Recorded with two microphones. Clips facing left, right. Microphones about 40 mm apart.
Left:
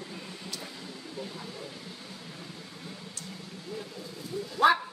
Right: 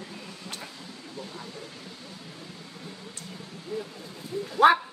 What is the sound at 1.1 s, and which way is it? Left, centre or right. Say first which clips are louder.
Speech: even; centre.